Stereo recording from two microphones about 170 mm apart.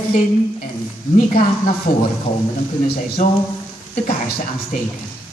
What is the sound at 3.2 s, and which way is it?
Speech, 45° left (ahead or behind).